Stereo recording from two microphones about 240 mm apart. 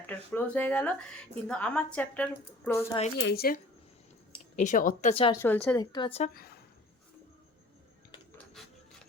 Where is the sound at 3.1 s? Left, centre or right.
Left.